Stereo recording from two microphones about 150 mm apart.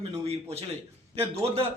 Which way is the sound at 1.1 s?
40° right (ahead or behind).